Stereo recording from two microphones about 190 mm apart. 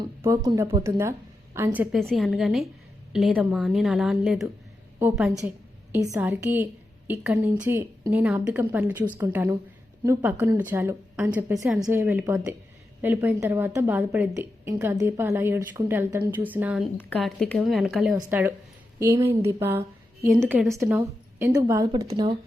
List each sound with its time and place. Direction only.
0.2 s a woman's voice: 15° right (ahead or behind)
2.0 s a woman's voice: centre (ahead or behind); by 22.0 s 20° right (ahead or behind)
22.0 s speech: 30° right (ahead or behind)